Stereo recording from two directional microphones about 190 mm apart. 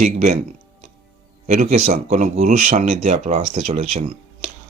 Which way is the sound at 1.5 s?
40° right (ahead or behind).